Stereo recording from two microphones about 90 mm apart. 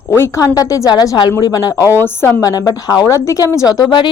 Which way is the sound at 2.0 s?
25° left (ahead or behind).